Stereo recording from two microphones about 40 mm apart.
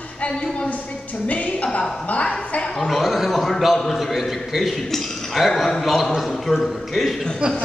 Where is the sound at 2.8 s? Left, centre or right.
Centre.